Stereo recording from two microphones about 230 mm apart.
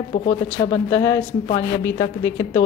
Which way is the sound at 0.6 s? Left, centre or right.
Centre.